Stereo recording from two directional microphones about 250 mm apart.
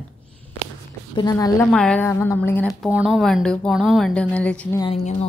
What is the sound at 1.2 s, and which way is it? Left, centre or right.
A woman's voice, centre.